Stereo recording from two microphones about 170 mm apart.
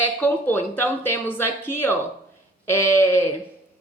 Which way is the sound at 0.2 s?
10° left (ahead or behind).